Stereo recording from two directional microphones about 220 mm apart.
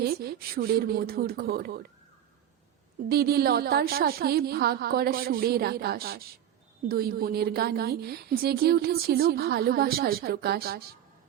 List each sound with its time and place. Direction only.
0.0 s a woman's voice: 45° right (ahead or behind)
3.1 s a woman's voice: 45° right (ahead or behind)